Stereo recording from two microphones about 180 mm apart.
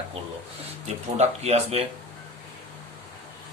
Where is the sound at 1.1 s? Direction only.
35° right (ahead or behind).